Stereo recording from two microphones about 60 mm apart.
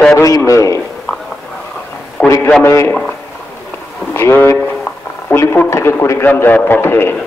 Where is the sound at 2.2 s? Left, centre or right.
Left.